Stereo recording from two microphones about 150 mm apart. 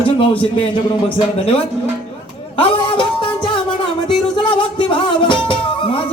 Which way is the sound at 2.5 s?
35° left (ahead or behind).